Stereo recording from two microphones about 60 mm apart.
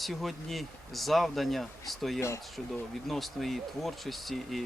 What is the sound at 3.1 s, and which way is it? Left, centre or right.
Speech, centre.